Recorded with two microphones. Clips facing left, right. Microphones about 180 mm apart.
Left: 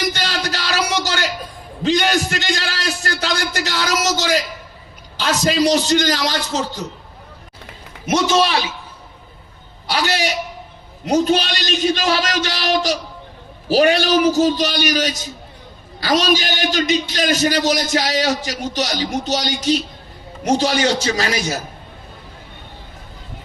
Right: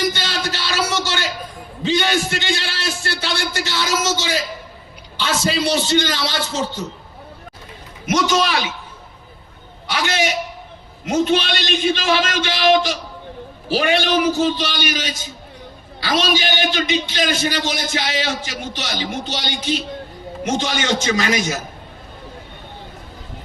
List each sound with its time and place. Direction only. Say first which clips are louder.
0.2 s a sound: left 1 dB; 40° left (ahead or behind)
1.9 s a man's voice: left 2 dB; 40° left (ahead or behind)
8.0 s a man's voice: left 2 dB; 30° left (ahead or behind)
9.8 s a man's voice: left 1 dB; 35° left (ahead or behind)